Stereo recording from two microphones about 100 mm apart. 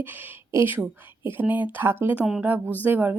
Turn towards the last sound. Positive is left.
turn(degrees=-20)  # may be behind; listen again after turning